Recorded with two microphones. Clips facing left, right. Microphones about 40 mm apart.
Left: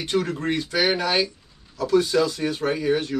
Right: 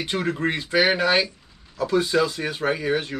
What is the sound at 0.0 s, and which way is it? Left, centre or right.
Speech, right.